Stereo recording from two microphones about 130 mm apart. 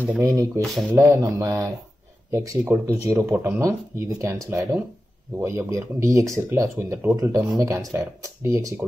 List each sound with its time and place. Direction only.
0.2 s speech: 25° right (ahead or behind)
0.6 s speech: centre (ahead or behind)
0.9 s speech: 25° right (ahead or behind)